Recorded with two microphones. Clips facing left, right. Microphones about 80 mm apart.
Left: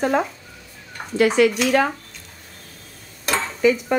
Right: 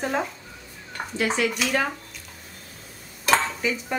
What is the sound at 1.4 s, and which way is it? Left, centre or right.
Speech, left.